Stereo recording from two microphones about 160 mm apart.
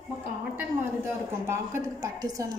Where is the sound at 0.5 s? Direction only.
15° right (ahead or behind).